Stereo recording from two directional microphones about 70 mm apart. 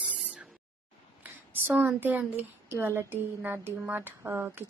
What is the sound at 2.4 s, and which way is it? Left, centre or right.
Speech, right.